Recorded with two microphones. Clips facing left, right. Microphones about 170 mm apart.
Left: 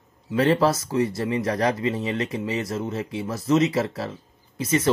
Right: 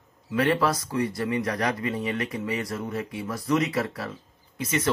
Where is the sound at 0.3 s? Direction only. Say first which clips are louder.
Left 4 dB; 30° left (ahead or behind).